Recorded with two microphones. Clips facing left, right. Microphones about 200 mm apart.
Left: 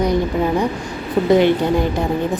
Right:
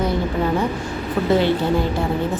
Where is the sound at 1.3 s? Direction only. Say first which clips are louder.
Left 4 dB; 15° left (ahead or behind).